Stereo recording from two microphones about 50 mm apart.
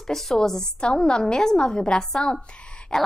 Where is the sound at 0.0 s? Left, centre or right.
Centre.